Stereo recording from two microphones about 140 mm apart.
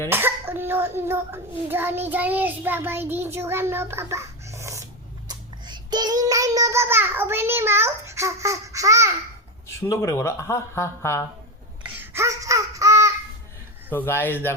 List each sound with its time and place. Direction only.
0.1 s a child's voice: 15° right (ahead or behind)
5.3 s child singing: 30° right (ahead or behind)
9.8 s speech: 20° left (ahead or behind)
11.9 s a sound: 20° right (ahead or behind)
13.9 s speech: 15° left (ahead or behind)